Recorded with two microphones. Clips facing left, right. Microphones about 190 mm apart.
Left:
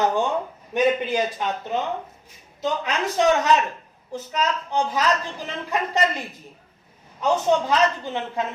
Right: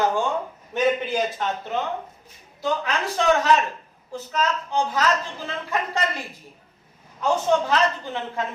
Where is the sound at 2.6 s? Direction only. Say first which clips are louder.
Even; 20° left (ahead or behind).